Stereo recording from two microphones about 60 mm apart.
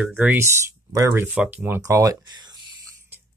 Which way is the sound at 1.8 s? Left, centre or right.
Right.